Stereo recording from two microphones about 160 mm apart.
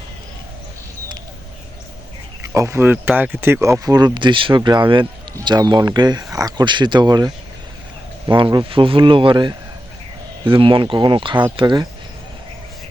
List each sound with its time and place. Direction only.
2.4 s speech: 20° right (ahead or behind)